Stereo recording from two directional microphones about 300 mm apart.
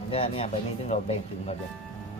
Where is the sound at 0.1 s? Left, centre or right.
Centre.